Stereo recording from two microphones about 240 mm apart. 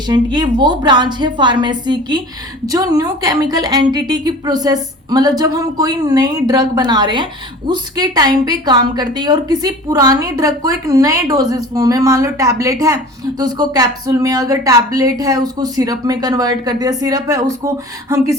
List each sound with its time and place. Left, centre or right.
0.1 s a woman's voice: centre